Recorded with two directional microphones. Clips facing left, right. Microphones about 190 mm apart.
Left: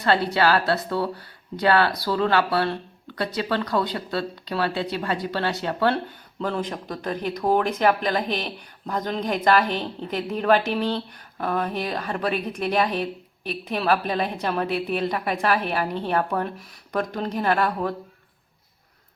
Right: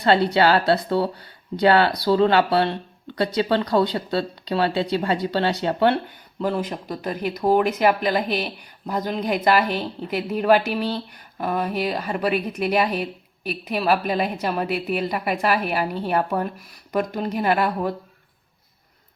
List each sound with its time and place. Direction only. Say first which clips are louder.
0.3 s speech: right 3 dB; 25° right (ahead or behind)
6.4 s speech: right 3 dB; 10° right (ahead or behind)